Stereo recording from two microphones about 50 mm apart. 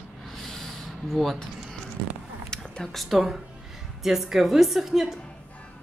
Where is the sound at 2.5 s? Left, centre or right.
Centre.